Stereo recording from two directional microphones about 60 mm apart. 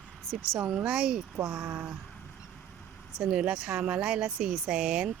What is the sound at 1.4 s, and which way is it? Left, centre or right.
Speech, right.